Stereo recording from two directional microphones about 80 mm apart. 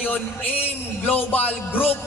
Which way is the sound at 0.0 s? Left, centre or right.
Centre.